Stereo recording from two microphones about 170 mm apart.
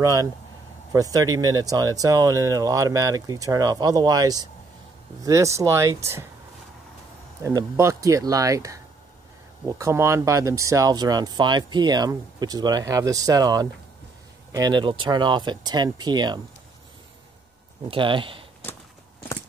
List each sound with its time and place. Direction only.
0.0 s speech: 20° right (ahead or behind)
7.4 s speech: 15° right (ahead or behind)
17.8 s speech: 30° right (ahead or behind)